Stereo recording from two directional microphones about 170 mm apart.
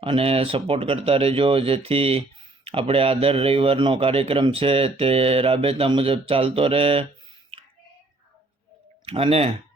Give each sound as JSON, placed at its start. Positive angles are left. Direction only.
{"t": 0.0, "sound": "a man's voice", "side_deg": -35}
{"t": 9.0, "sound": "a man's voice", "side_deg": -35}